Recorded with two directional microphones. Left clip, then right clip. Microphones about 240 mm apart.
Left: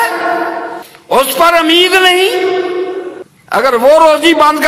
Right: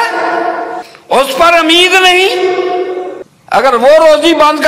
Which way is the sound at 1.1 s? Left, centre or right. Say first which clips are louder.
Right 1 dB; left.